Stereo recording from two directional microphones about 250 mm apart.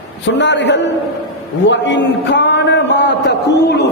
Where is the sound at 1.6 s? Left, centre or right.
Left.